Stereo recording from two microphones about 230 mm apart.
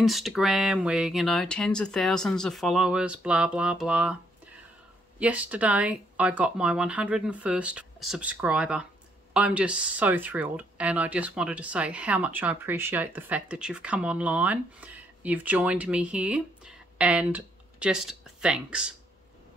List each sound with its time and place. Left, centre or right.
0.0 s speech: centre
5.2 s speech: centre